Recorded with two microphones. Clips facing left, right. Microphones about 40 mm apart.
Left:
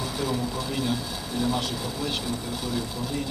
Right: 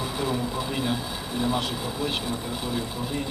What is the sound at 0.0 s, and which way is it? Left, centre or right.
Speech, right.